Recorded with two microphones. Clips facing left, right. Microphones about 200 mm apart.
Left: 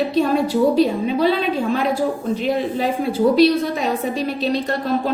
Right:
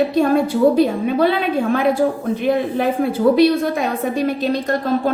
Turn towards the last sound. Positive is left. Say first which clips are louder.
# right 2 dB
turn(degrees=-50)  # may be behind; listen again after turning